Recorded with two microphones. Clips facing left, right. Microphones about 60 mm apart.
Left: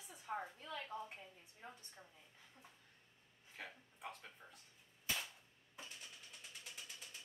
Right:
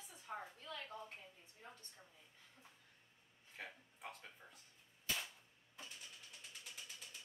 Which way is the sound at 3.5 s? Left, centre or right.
Centre.